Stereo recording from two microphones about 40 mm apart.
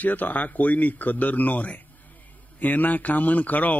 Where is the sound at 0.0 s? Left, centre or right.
Left.